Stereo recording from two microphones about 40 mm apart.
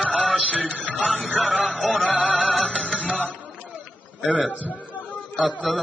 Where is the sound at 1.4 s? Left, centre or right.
Right.